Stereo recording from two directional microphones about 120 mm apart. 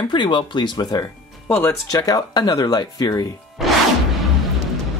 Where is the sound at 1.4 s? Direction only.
20° left (ahead or behind).